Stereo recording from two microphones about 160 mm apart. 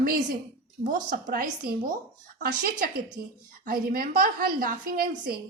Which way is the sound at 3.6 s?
65° right (ahead or behind).